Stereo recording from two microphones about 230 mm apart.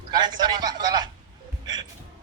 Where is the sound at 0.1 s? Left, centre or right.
Centre.